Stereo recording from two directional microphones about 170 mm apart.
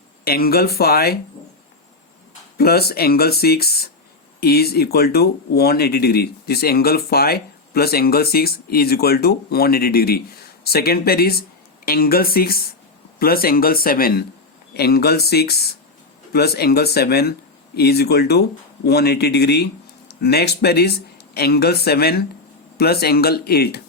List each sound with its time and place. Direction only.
0.3 s speech: 65° left (ahead or behind)
2.6 s speech: 65° left (ahead or behind)